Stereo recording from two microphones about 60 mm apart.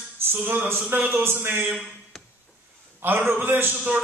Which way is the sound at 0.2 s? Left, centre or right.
Right.